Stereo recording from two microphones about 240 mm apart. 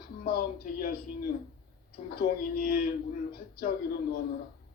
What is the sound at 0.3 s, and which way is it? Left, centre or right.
Speech, left.